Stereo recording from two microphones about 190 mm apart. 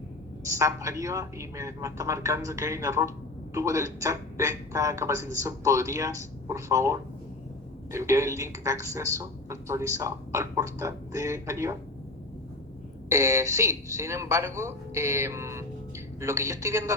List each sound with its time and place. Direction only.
0.4 s a woman's voice: 15° right (ahead or behind)
13.1 s a woman's voice: 15° right (ahead or behind)